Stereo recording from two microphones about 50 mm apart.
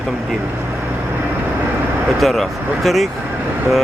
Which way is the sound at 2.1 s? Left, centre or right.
Centre.